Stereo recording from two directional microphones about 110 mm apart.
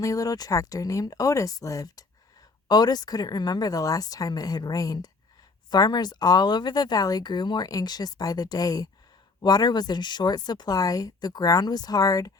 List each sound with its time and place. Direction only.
0.0 s speech: 30° left (ahead or behind)